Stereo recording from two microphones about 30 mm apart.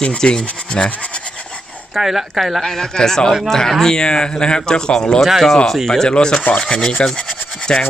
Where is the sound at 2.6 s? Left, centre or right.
Centre.